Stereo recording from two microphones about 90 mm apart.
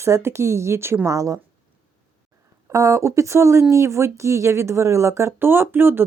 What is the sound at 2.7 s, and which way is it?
Speech, 35° right (ahead or behind).